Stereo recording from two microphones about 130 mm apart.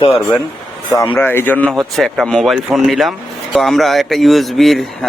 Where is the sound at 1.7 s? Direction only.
Centre (ahead or behind).